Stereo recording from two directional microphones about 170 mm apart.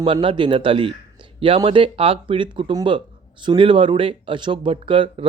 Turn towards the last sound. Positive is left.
turn(degrees=-30)  # may be behind; listen again after turning